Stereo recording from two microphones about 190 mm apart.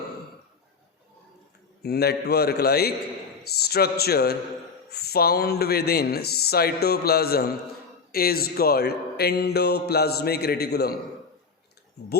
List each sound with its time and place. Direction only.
1.8 s speech: 55° left (ahead or behind)